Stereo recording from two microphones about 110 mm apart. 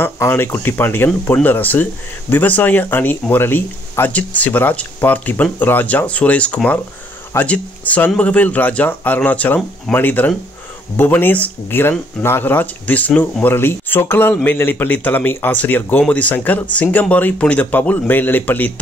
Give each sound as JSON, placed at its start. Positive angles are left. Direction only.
{"t": 0.0, "sound": "speech", "side_deg": 20}